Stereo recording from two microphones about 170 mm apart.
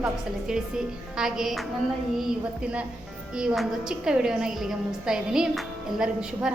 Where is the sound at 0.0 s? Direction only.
5° right (ahead or behind).